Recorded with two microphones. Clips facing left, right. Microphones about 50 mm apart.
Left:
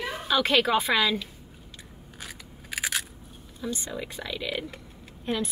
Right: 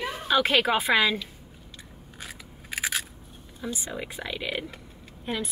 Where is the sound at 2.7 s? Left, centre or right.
Centre.